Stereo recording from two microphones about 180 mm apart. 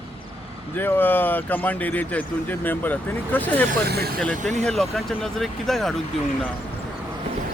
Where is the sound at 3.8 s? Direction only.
65° right (ahead or behind).